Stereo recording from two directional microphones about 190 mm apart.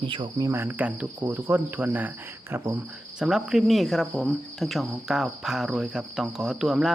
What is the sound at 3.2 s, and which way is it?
Cricket, 5° right (ahead or behind).